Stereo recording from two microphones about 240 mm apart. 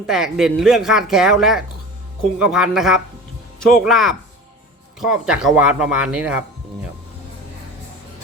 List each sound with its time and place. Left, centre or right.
0.0 s speech: centre